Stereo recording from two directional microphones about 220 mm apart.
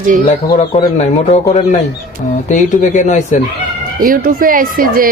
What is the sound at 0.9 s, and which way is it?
Speech, 30° left (ahead or behind).